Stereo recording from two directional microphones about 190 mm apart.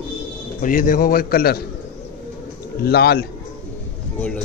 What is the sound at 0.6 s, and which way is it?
A man's voice, 45° left (ahead or behind).